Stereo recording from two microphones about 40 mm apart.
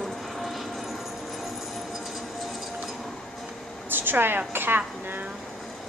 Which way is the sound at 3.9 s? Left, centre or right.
Right.